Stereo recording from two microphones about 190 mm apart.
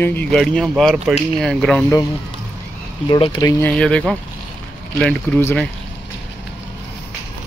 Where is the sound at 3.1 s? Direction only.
25° left (ahead or behind); by 5.7 s 5° left (ahead or behind).